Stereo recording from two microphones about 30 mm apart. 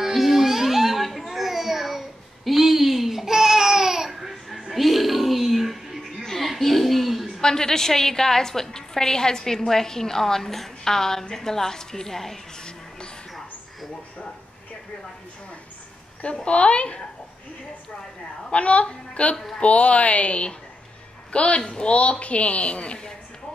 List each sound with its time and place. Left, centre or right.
0.0 s a sound: centre
6.2 s music: centre
6.6 s a sound: centre
7.4 s a woman's voice: centre
16.4 s a man's voice: left
18.5 s a woman's voice: left
19.3 s a woman's voice: centre
19.6 s a woman's voice: left
21.9 s a woman's voice: left